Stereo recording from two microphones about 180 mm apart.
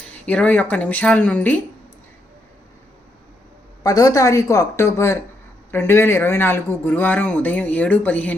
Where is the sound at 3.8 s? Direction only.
20° left (ahead or behind).